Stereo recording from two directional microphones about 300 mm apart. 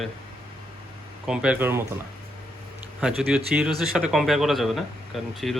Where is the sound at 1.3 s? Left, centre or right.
Centre.